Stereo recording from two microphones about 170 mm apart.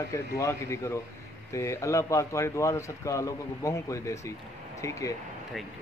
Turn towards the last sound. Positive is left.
turn(degrees=15)  # may be behind; listen again after turning